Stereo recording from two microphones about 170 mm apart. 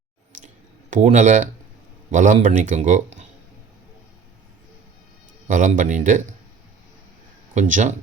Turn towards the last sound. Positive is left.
turn(degrees=-45)  # may be behind; listen again after turning